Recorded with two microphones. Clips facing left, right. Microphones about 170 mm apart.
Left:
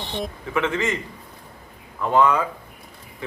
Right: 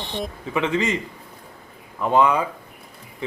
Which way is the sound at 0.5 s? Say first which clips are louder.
Right 1 dB; 20° right (ahead or behind).